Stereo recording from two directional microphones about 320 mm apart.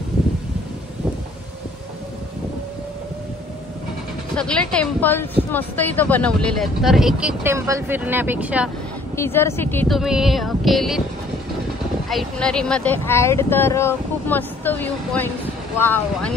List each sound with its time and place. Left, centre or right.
4.4 s speech: centre
9.1 s speech: centre
12.1 s speech: centre